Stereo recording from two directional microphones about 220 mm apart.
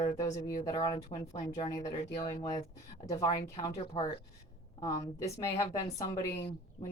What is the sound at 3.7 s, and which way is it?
Speech, 30° left (ahead or behind).